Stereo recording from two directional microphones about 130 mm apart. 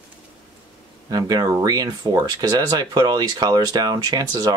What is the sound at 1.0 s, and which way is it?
Speech, 30° right (ahead or behind).